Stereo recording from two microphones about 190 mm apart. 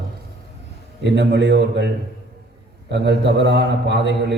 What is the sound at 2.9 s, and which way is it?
A man's voice, 65° right (ahead or behind).